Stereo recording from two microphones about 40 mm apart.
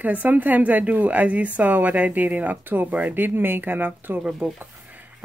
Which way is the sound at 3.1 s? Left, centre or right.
Right.